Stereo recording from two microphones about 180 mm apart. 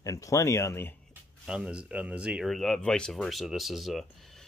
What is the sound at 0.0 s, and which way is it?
Speech, 20° left (ahead or behind).